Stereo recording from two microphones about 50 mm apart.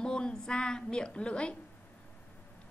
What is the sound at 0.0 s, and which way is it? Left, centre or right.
A woman's voice, centre.